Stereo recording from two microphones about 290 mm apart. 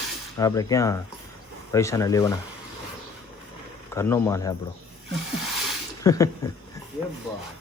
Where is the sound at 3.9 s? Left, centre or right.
Centre.